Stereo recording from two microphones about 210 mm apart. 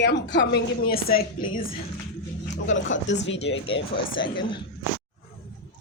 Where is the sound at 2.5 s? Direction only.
60° left (ahead or behind).